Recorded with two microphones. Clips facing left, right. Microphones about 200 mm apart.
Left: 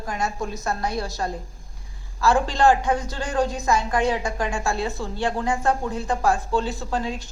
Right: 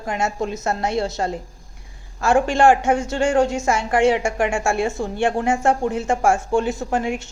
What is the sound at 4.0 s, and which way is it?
Speech, 90° right.